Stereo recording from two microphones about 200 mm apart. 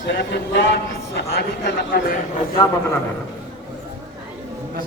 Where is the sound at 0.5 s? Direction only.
60° left (ahead or behind).